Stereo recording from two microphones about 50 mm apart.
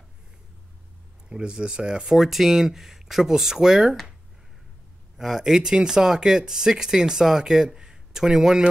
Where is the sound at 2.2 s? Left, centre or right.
Centre.